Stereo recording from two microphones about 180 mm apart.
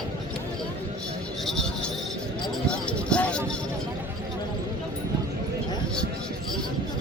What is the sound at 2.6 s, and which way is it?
Vehicle, 5° left (ahead or behind).